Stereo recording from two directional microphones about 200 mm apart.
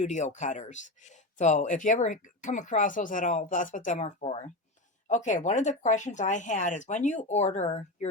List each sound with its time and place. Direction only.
0.0 s speech: 35° left (ahead or behind)